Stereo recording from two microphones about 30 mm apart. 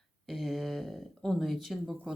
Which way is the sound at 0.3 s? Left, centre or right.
Centre.